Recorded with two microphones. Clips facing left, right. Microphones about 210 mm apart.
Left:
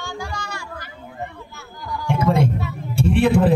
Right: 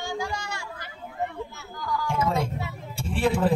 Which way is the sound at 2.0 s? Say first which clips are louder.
Left 8 dB; 65° left (ahead or behind).